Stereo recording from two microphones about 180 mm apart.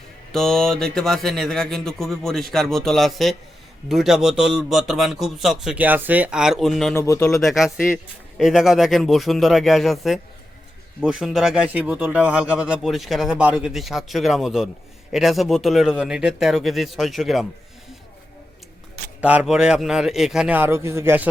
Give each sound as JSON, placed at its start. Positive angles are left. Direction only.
{"t": 0.3, "sound": "speech", "side_deg": 5}
{"t": 6.9, "sound": "speech", "side_deg": 15}
{"t": 7.4, "sound": "speech", "side_deg": 0}
{"t": 19.2, "sound": "speech", "side_deg": -5}